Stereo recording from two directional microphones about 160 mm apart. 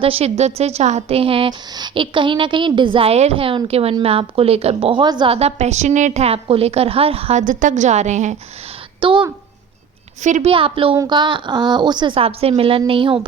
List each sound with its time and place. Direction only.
0.0 s a woman's voice: 40° right (ahead or behind)
7.4 s a woman's voice: 55° right (ahead or behind)
9.0 s speech: 30° right (ahead or behind)
10.2 s a woman's voice: 50° right (ahead or behind)
10.5 s a woman's voice: 35° right (ahead or behind)